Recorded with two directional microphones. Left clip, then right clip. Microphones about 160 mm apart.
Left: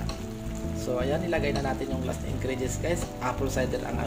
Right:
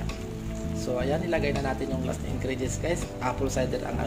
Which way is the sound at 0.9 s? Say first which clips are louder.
Even; 5° right (ahead or behind).